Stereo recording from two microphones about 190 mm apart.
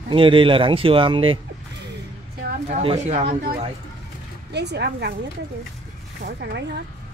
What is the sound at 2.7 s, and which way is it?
Speech, 30° right (ahead or behind).